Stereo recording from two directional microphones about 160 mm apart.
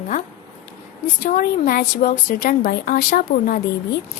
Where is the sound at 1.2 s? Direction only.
60° left (ahead or behind).